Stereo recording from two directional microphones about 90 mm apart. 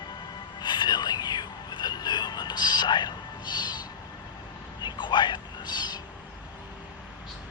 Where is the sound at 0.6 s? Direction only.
55° left (ahead or behind).